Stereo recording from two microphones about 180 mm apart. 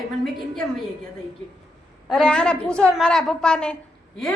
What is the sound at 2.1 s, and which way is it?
A woman's voice, centre (ahead or behind).